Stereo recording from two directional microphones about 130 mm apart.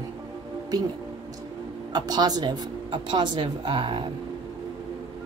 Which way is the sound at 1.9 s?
30° right (ahead or behind).